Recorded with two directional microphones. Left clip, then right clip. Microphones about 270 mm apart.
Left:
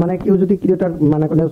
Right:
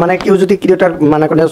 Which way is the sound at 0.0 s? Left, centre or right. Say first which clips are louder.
Right 7 dB; centre.